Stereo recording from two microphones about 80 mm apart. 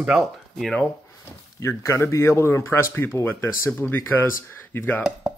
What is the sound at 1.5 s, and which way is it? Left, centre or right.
Speech, left.